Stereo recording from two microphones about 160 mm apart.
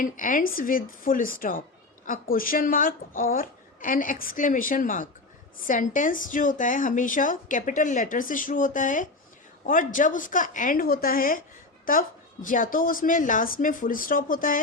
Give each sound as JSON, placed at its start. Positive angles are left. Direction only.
{"t": 0.0, "sound": "a woman's voice", "side_deg": 55}